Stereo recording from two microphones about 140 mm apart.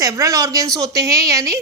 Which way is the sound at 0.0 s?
20° right (ahead or behind).